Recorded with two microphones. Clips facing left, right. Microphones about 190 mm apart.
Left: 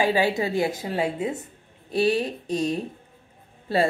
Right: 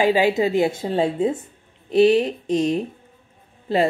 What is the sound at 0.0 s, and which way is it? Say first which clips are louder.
A woman's voice: right 4 dB; 20° right (ahead or behind).